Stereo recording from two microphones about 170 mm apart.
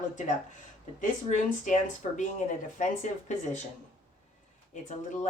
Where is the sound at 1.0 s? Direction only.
50° left (ahead or behind).